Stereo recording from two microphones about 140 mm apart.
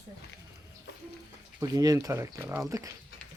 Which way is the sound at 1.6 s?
25° right (ahead or behind).